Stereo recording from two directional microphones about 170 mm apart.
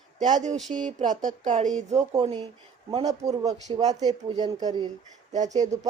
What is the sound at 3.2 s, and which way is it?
Speech, 20° right (ahead or behind).